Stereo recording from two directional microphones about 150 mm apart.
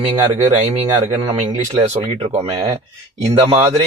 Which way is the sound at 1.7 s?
45° right (ahead or behind).